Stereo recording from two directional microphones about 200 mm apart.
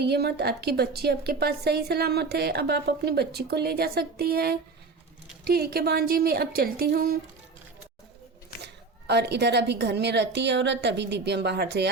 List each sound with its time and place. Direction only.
0.0 s a woman's voice: 55° right (ahead or behind)
8.6 s a woman's voice: 55° right (ahead or behind)